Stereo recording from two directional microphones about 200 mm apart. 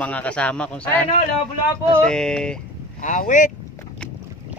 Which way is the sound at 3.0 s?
40° left (ahead or behind).